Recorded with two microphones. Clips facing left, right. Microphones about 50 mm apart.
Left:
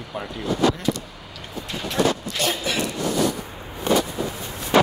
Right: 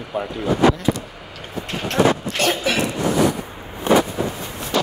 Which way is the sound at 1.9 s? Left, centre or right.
Right.